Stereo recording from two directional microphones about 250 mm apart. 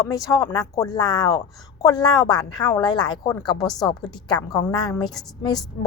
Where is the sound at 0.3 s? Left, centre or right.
Centre.